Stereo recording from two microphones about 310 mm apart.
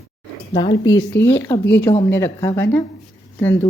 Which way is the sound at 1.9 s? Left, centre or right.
Centre.